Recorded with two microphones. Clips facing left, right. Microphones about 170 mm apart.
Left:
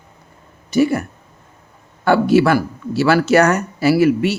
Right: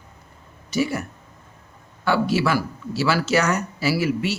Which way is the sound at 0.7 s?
55° left (ahead or behind).